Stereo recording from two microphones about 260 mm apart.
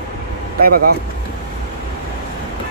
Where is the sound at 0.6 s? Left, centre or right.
Right.